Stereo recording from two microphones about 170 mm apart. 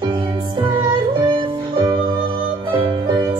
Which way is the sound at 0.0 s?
30° right (ahead or behind).